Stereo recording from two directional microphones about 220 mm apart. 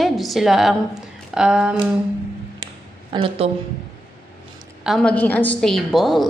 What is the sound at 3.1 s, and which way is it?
Speech, 25° right (ahead or behind).